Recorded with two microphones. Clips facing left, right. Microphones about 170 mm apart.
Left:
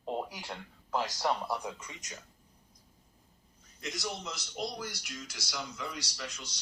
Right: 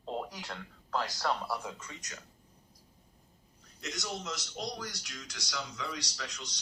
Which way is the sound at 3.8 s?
Centre (ahead or behind).